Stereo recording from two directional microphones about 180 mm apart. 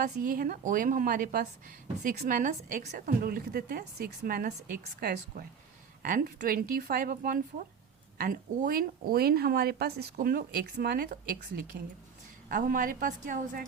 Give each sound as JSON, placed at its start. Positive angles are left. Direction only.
{"t": 0.0, "sound": "a woman's voice", "side_deg": -50}
{"t": 11.7, "sound": "a woman's voice", "side_deg": -75}
{"t": 12.5, "sound": "a woman's voice", "side_deg": -50}